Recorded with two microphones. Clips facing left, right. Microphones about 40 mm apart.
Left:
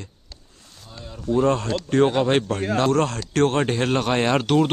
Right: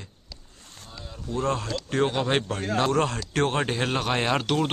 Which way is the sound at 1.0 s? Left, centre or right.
Centre.